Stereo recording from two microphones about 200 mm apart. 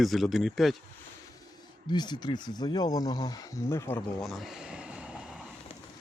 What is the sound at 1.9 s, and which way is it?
Speech, 20° left (ahead or behind).